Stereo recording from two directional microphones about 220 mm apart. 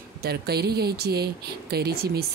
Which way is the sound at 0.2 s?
45° right (ahead or behind).